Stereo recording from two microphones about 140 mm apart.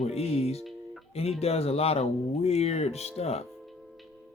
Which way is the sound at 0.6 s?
Centre (ahead or behind).